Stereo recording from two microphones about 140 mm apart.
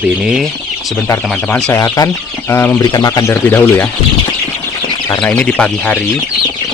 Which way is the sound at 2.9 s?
30° left (ahead or behind).